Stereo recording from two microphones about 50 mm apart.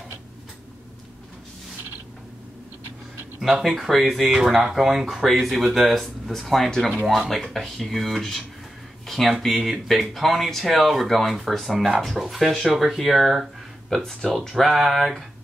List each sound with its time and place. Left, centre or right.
3.3 s speech: centre
13.9 s speech: centre
14.5 s speech: centre